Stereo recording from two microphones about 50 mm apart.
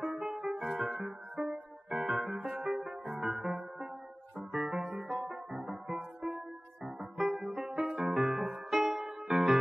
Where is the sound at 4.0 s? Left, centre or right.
Right.